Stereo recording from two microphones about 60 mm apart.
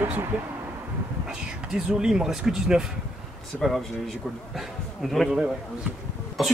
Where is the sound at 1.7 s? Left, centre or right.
Centre.